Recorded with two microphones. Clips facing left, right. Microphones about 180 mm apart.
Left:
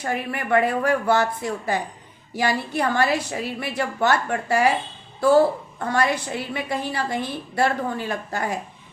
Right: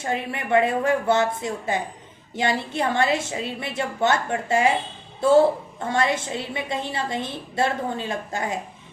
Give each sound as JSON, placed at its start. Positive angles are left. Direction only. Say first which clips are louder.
{"t": 0.0, "sound": "a woman's voice", "louder": "left 1 dB", "side_deg": -25}